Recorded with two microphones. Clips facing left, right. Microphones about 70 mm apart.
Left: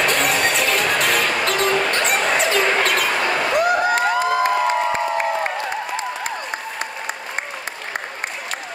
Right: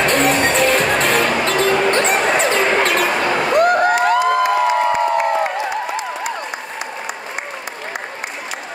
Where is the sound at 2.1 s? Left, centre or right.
Right.